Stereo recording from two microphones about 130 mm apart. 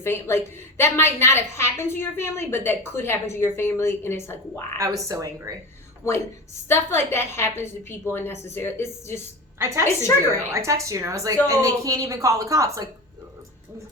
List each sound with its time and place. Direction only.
0.0 s a woman's voice: 20° left (ahead or behind)
4.8 s speech: 25° right (ahead or behind)
6.7 s a woman's voice: 20° left (ahead or behind)
9.6 s speech: 25° right (ahead or behind)